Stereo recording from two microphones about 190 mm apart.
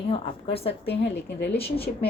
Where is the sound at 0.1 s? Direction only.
30° left (ahead or behind).